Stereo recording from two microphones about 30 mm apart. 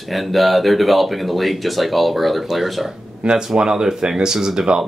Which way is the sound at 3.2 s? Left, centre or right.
Right.